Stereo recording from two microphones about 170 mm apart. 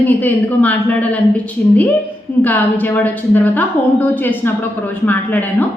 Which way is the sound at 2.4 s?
10° left (ahead or behind).